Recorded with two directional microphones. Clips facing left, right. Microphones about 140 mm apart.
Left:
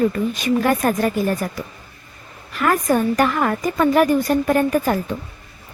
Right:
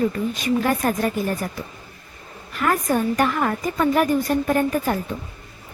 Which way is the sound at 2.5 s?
90° left.